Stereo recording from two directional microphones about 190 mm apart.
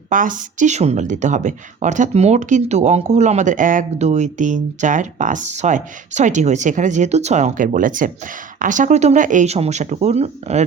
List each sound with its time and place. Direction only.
0.1 s speech: 45° right (ahead or behind)